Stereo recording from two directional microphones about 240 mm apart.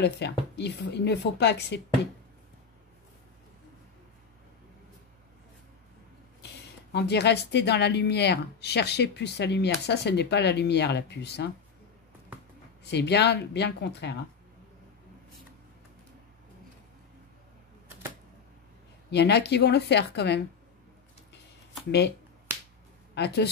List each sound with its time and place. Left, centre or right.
0.0 s a woman's voice: left
6.9 s a woman's voice: left
12.9 s a woman's voice: left
19.0 s a woman's voice: left
23.1 s a woman's voice: left